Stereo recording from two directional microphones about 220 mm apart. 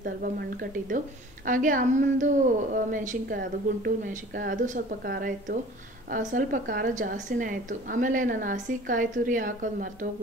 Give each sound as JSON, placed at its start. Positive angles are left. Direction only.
{"t": 0.8, "sound": "a woman's voice", "side_deg": -35}